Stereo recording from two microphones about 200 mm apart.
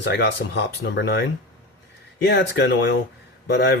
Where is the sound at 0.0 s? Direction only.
55° left (ahead or behind).